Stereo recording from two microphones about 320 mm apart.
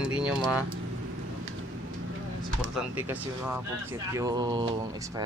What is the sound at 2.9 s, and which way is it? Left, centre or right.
Speech, centre.